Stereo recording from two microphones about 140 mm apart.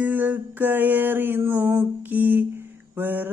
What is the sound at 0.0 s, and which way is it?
Mantra, 10° right (ahead or behind).